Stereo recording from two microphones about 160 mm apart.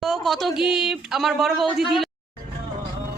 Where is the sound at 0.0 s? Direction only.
Centre (ahead or behind).